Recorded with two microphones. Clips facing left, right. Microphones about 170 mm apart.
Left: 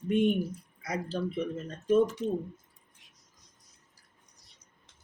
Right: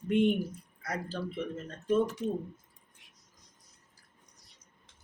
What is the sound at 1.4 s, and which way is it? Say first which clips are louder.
Speech: left 3 dB; 15° left (ahead or behind).